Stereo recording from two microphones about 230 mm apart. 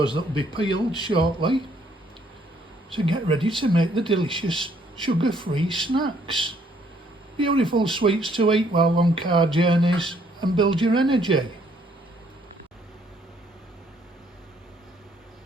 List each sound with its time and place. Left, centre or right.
0.0 s speech: right
2.9 s speech: right